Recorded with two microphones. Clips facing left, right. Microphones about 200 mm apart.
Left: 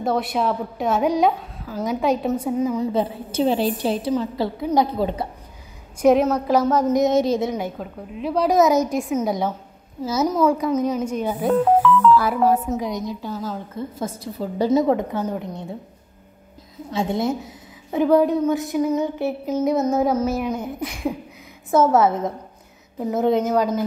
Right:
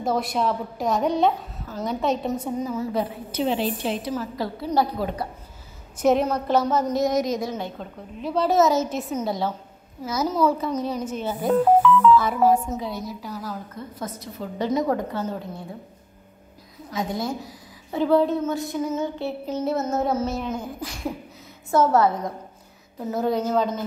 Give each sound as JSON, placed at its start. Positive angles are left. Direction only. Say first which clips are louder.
{"t": 0.0, "sound": "a woman's voice", "louder": "left 2 dB", "side_deg": 0}
{"t": 2.9, "sound": "a woman's voice", "louder": "left 4 dB", "side_deg": 25}
{"t": 4.1, "sound": "a woman's voice", "louder": "left 5 dB", "side_deg": 20}
{"t": 5.9, "sound": "a woman's voice", "louder": "left 4 dB", "side_deg": 5}
{"t": 6.9, "sound": "a woman's voice", "louder": "left 5 dB", "side_deg": 20}
{"t": 7.5, "sound": "a woman's voice", "louder": "left 4 dB", "side_deg": 10}
{"t": 8.9, "sound": "a woman's voice", "louder": "left 5 dB", "side_deg": 10}
{"t": 11.4, "sound": "a woman's voice", "louder": "even", "side_deg": 0}
{"t": 12.7, "sound": "a woman's voice", "louder": "left 4 dB", "side_deg": 15}
{"t": 16.9, "sound": "a woman's voice", "louder": "left 5 dB", "side_deg": 25}